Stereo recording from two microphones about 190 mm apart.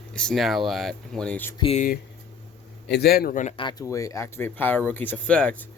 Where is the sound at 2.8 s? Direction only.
60° left (ahead or behind).